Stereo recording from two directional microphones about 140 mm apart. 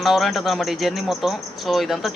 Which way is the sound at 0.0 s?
Centre (ahead or behind).